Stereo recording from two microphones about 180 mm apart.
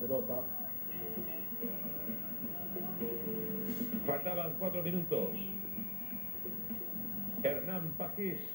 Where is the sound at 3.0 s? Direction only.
40° right (ahead or behind).